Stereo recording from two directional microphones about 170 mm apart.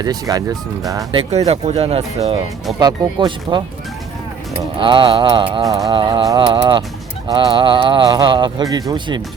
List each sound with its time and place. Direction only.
0.0 s music: 20° right (ahead or behind)
1.2 s speech: 40° right (ahead or behind)
2.7 s music: 25° right (ahead or behind)
4.8 s music: 30° right (ahead or behind)